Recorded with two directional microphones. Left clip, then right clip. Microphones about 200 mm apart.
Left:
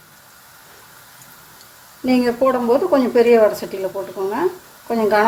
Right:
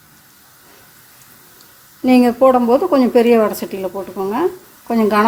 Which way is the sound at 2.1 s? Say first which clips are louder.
Right 5 dB; 40° right (ahead or behind).